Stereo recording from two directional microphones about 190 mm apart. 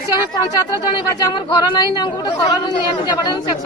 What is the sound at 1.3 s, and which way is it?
Speech, 25° left (ahead or behind).